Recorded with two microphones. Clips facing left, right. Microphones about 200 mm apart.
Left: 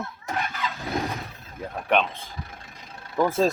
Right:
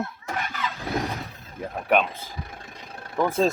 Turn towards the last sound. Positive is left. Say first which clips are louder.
# even
turn(degrees=0)  # may be behind; listen again after turning